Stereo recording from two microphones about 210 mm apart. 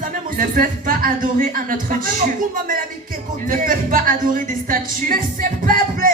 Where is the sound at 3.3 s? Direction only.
40° right (ahead or behind).